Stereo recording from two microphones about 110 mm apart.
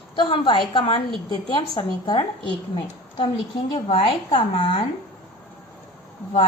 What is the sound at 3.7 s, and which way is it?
A woman's voice, 60° left (ahead or behind).